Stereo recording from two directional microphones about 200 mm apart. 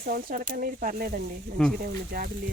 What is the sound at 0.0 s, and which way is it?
Speech, 45° right (ahead or behind).